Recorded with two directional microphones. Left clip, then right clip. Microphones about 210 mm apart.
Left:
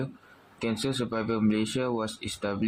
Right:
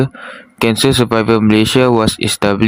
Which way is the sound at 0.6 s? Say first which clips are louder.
Right 18 dB; 45° right (ahead or behind).